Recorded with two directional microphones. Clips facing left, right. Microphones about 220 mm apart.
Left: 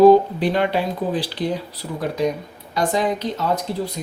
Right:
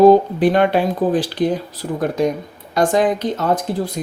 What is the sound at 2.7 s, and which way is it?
Speech, 50° right (ahead or behind).